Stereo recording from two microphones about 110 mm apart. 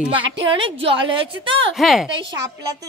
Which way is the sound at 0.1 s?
45° right (ahead or behind).